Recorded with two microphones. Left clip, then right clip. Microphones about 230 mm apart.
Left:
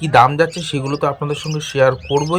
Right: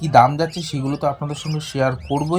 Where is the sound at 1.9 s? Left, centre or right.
Left.